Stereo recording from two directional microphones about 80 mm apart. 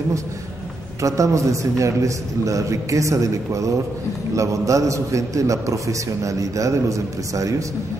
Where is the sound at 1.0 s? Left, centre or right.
Right.